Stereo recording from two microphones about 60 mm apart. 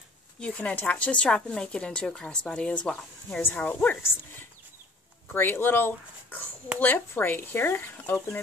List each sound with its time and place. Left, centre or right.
0.4 s speech: left
3.4 s speech: left
5.3 s speech: left